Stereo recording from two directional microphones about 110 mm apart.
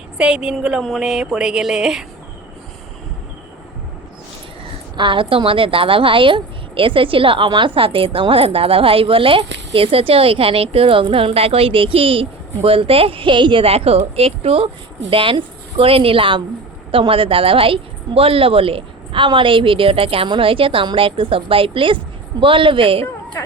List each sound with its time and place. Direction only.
0.2 s a woman's voice: 10° right (ahead or behind)
4.9 s a woman's voice: 50° right (ahead or behind)
15.1 s a woman's voice: 50° right (ahead or behind)